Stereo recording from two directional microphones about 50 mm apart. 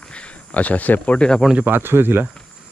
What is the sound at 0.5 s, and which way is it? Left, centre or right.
Speech, left.